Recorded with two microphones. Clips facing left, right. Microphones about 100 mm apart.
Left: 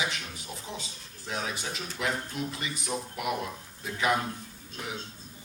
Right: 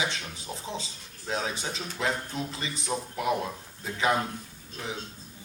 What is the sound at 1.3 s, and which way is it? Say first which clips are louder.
A man's voice: right 3 dB; 30° right (ahead or behind).